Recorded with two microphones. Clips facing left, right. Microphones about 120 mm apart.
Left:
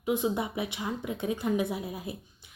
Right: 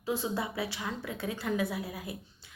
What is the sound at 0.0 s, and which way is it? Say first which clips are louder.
Speech: left 4 dB; 20° left (ahead or behind).